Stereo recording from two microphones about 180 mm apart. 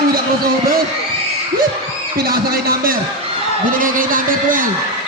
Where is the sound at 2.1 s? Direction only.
55° right (ahead or behind).